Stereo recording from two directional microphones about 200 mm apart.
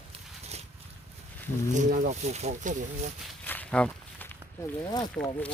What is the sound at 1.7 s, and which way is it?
Speech, 40° right (ahead or behind).